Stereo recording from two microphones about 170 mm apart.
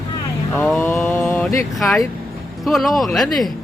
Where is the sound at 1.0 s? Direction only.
10° left (ahead or behind).